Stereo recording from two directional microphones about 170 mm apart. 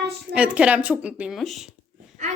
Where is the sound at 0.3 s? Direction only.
5° right (ahead or behind).